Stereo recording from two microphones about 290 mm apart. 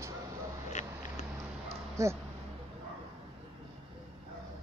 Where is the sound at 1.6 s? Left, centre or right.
Centre.